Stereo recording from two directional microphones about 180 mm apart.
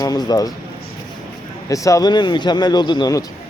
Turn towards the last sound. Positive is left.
turn(degrees=20)  # may be behind; listen again after turning